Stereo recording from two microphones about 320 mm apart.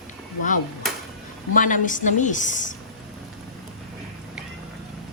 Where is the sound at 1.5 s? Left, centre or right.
Left.